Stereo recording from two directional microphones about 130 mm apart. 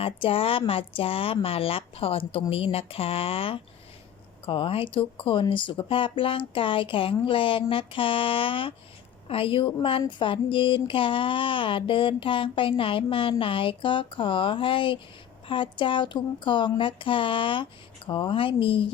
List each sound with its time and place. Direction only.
0.0 s speech: 45° left (ahead or behind)